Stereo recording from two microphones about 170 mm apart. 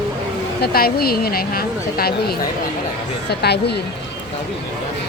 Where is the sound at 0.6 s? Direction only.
65° left (ahead or behind).